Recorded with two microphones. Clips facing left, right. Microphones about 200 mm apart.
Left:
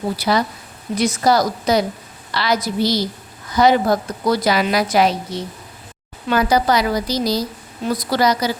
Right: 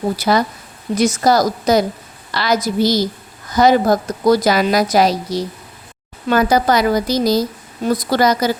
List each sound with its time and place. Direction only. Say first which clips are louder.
0.2 s a woman's voice: right 3 dB; 45° right (ahead or behind)